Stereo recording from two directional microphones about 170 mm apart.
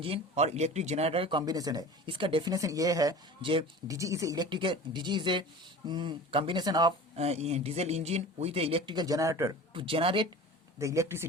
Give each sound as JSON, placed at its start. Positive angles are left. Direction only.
{"t": 0.0, "sound": "speech", "side_deg": -35}
{"t": 3.9, "sound": "speech", "side_deg": -20}
{"t": 7.2, "sound": "speech", "side_deg": -40}
{"t": 9.7, "sound": "speech", "side_deg": -30}
{"t": 10.8, "sound": "speech", "side_deg": -15}